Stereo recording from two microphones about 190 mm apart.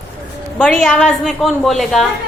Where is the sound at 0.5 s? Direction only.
Centre (ahead or behind).